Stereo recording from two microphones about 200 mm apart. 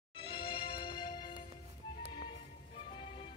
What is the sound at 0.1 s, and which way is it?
Music, 25° left (ahead or behind).